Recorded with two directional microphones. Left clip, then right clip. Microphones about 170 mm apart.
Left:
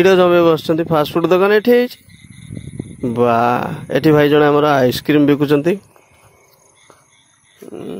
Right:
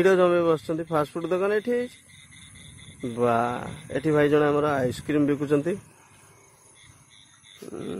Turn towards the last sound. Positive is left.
turn(degrees=10)  # may be behind; listen again after turning